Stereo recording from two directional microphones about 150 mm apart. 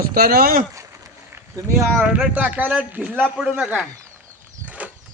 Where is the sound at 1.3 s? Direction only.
20° right (ahead or behind).